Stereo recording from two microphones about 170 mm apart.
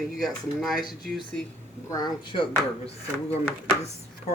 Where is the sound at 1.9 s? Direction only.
25° left (ahead or behind).